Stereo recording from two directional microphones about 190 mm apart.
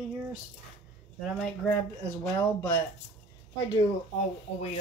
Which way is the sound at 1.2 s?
5° left (ahead or behind).